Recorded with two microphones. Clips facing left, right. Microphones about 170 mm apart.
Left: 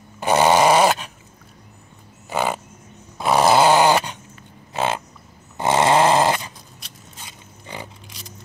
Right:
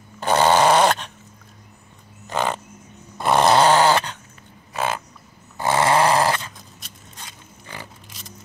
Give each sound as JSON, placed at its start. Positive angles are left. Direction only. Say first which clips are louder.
{"t": 0.2, "sound": "dog", "louder": "left 1 dB", "side_deg": 10}
{"t": 2.2, "sound": "a sound", "louder": "left 1 dB", "side_deg": 10}
{"t": 3.2, "sound": "dog", "louder": "left 1 dB", "side_deg": 0}
{"t": 4.7, "sound": "a sound", "louder": "left 2 dB", "side_deg": 25}
{"t": 5.6, "sound": "dog", "louder": "left 2 dB", "side_deg": 20}
{"t": 7.2, "sound": "pig", "louder": "left 5 dB", "side_deg": 20}